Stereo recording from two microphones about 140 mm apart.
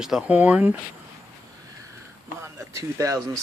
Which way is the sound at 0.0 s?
5° right (ahead or behind).